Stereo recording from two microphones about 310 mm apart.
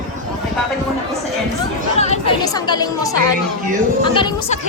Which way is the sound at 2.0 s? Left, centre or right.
Left.